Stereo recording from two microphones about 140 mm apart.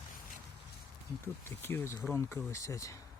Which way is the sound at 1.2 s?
15° left (ahead or behind).